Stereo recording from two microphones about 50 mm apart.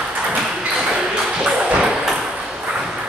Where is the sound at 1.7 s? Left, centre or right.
Centre.